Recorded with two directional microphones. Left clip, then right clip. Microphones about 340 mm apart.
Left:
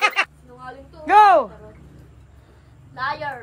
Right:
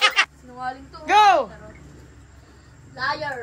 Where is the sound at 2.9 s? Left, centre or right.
Left.